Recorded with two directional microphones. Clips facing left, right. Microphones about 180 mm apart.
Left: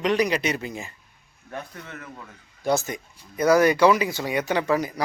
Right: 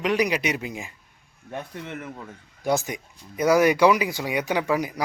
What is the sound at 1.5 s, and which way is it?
Speech, 20° right (ahead or behind).